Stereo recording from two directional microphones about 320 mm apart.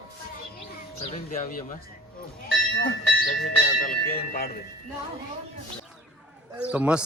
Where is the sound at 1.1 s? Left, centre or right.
Left.